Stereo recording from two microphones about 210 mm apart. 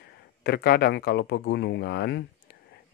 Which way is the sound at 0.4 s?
50° left (ahead or behind).